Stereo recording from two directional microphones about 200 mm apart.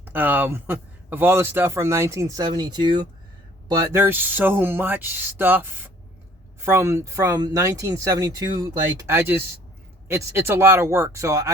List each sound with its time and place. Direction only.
0.0 s a man's voice: 10° right (ahead or behind)